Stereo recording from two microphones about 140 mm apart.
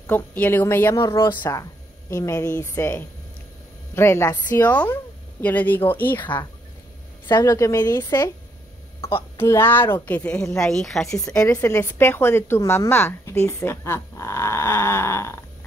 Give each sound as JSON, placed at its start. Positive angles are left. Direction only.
{"t": 0.0, "sound": "a woman's voice", "side_deg": 10}
{"t": 7.2, "sound": "speech", "side_deg": 30}
{"t": 9.1, "sound": "a woman's voice", "side_deg": 15}
{"t": 10.6, "sound": "a woman's voice", "side_deg": 5}
{"t": 11.2, "sound": "a woman's voice", "side_deg": 25}